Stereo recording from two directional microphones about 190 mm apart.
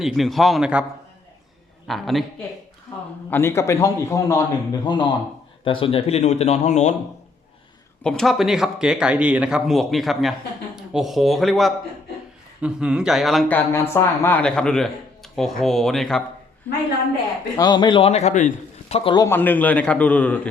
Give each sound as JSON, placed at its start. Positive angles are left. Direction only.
{"t": 0.0, "sound": "speech", "side_deg": 0}
{"t": 1.9, "sound": "speech", "side_deg": 0}
{"t": 3.2, "sound": "a man's voice", "side_deg": 10}
{"t": 8.0, "sound": "speech", "side_deg": 5}
{"t": 17.6, "sound": "a man's voice", "side_deg": 20}
{"t": 19.2, "sound": "a man's voice", "side_deg": 10}